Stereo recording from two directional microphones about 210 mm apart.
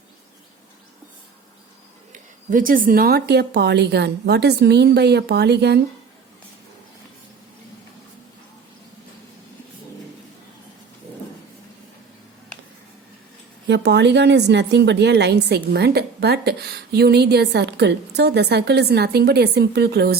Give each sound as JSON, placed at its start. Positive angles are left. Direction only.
{"t": 2.5, "sound": "a woman's voice", "side_deg": -40}
{"t": 13.7, "sound": "a woman's voice", "side_deg": -55}